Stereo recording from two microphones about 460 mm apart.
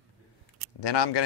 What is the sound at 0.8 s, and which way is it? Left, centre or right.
Speech, left.